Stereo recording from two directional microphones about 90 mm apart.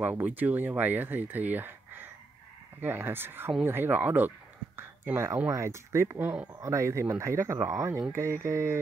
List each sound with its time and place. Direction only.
0.0 s speech: 20° right (ahead or behind)